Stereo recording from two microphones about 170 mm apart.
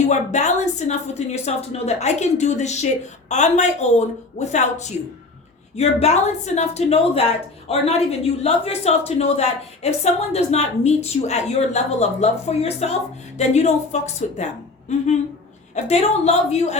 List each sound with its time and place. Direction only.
0.1 s a woman's voice: 45° left (ahead or behind)